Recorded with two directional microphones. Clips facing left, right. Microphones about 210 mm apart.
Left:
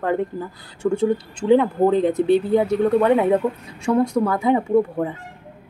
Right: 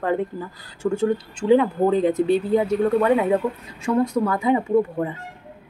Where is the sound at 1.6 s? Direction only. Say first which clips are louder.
Left 1 dB; 10° right (ahead or behind).